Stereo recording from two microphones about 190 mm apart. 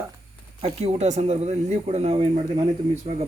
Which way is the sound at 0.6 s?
35° right (ahead or behind).